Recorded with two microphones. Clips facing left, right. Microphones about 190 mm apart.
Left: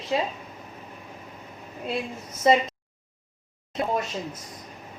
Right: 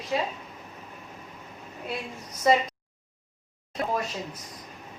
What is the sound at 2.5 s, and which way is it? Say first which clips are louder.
Speech: left 2 dB; 20° left (ahead or behind).